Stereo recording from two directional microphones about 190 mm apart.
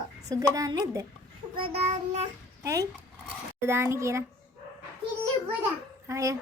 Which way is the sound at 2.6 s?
15° right (ahead or behind).